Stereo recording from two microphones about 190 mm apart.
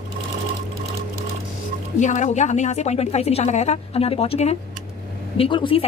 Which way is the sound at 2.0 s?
40° left (ahead or behind).